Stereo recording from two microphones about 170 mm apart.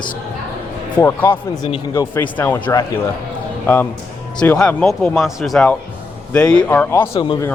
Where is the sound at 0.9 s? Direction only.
15° left (ahead or behind).